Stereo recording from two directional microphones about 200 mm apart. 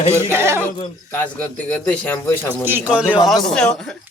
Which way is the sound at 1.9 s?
10° left (ahead or behind).